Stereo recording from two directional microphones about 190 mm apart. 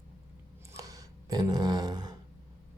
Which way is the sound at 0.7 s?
20° right (ahead or behind).